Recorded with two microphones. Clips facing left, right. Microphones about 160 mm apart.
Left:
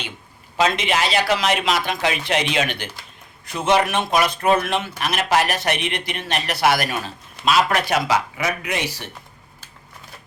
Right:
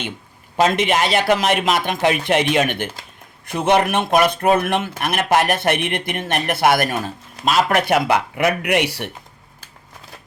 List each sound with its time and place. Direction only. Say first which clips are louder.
0.5 s speech: right 3 dB; 50° right (ahead or behind); by 9.0 s 65° right (ahead or behind)